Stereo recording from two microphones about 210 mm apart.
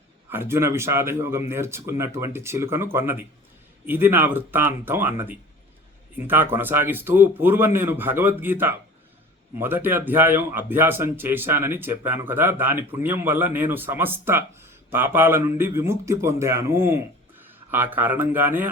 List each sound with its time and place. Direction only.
0.3 s speech: 10° right (ahead or behind)